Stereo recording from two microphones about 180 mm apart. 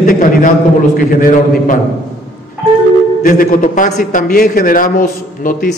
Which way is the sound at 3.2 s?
50° left (ahead or behind).